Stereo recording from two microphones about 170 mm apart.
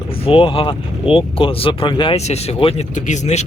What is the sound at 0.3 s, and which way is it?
Speech, 30° left (ahead or behind).